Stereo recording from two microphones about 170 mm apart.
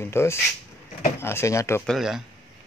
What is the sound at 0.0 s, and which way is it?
Speech, 15° left (ahead or behind).